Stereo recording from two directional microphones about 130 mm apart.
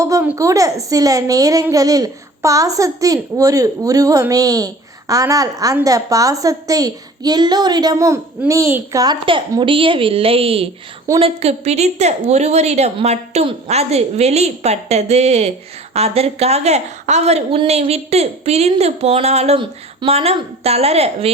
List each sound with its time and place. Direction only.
0.0 s a child's voice: 25° right (ahead or behind)
9.6 s a woman's voice: 40° right (ahead or behind)